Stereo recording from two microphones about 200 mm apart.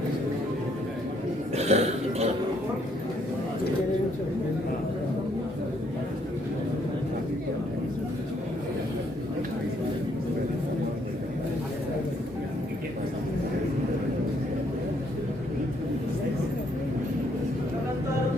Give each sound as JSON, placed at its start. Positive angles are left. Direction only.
{"t": 1.5, "sound": "burping", "side_deg": -30}